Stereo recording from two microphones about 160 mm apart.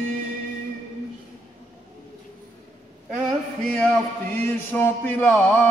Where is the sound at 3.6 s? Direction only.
5° left (ahead or behind).